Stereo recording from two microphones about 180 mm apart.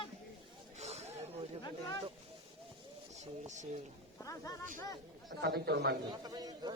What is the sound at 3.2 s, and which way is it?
Speech, 40° right (ahead or behind).